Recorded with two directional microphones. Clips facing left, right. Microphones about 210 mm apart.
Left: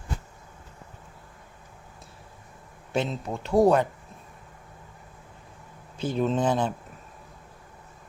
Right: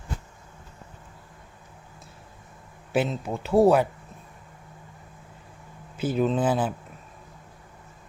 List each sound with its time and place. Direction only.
2.9 s speech: 5° right (ahead or behind)
6.0 s speech: 5° right (ahead or behind)